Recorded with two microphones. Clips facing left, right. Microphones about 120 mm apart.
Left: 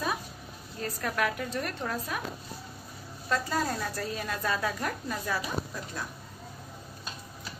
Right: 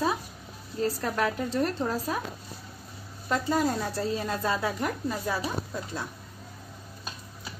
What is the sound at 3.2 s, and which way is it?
Speech, 20° right (ahead or behind).